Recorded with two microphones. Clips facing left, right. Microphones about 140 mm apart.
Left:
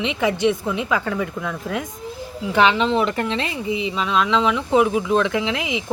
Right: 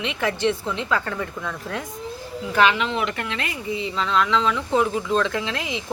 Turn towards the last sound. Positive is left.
turn(degrees=15)  # may be behind; listen again after turning